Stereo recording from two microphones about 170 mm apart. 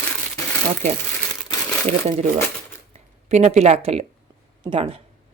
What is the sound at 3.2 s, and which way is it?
Speech, 40° right (ahead or behind).